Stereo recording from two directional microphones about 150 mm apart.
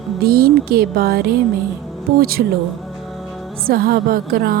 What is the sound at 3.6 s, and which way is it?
Speech, 85° right.